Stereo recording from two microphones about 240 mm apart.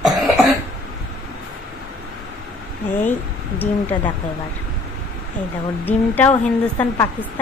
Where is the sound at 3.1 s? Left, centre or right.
Centre.